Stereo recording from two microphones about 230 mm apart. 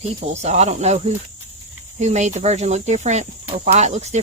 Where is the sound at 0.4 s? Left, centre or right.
Right.